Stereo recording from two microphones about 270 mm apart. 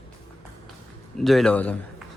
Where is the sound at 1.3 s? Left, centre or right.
Centre.